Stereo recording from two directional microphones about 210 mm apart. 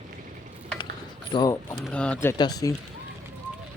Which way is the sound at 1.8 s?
5° left (ahead or behind).